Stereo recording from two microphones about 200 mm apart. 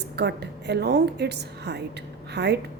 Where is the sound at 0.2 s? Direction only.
55° right (ahead or behind).